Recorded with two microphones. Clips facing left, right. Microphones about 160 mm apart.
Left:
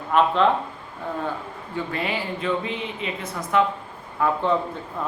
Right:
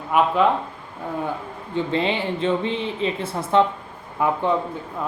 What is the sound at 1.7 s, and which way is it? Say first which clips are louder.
A woman's voice: right 5 dB; 25° right (ahead or behind).